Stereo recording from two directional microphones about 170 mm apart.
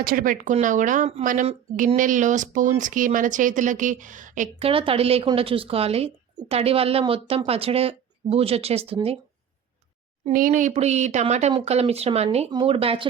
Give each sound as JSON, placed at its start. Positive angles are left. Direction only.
{"t": 0.0, "sound": "speech", "side_deg": -55}
{"t": 4.6, "sound": "a woman's voice", "side_deg": -30}
{"t": 10.3, "sound": "a woman's voice", "side_deg": -50}